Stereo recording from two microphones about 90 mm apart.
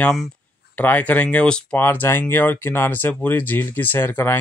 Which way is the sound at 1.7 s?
20° left (ahead or behind).